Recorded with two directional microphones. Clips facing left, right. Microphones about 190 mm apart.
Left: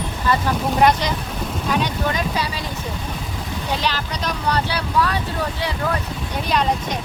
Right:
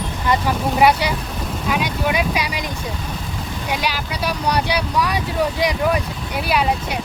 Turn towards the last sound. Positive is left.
turn(degrees=-10)  # may be behind; listen again after turning